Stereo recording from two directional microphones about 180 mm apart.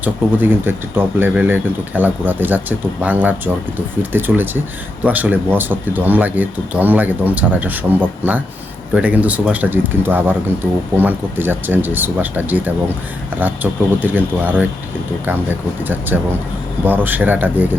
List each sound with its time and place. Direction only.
0.0 s speech: 10° right (ahead or behind)
15.8 s speech: 10° right (ahead or behind)